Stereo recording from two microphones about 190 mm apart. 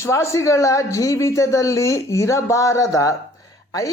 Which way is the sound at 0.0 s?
15° left (ahead or behind).